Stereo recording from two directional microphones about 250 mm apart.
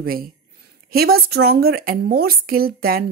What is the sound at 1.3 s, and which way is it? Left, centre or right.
Speech, right.